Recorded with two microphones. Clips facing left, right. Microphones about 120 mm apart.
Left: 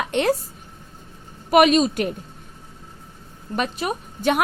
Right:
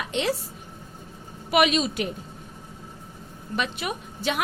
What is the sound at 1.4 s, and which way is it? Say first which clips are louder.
Speech: left 6 dB; 45° left (ahead or behind).